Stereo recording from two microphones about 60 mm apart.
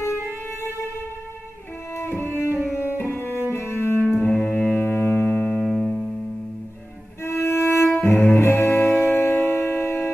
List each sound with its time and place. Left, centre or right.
0.0 s music: left
2.0 s music: left
3.0 s cello: left
3.5 s music: left
4.0 s music: right
4.7 s music: left
5.6 s music: centre
7.2 s violin: left
8.3 s music: left